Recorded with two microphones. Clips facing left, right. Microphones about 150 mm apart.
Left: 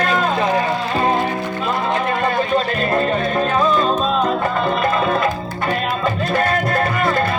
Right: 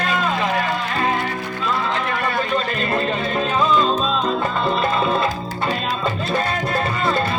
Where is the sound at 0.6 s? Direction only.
25° left (ahead or behind).